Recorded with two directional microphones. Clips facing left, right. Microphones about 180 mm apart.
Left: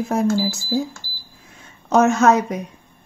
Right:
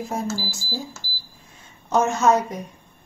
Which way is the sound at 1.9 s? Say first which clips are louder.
Left 4 dB; 75° left (ahead or behind).